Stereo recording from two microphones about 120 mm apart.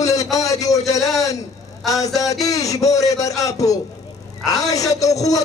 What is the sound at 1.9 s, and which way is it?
A man's voice, 30° left (ahead or behind).